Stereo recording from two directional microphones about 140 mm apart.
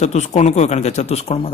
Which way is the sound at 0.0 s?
55° left (ahead or behind).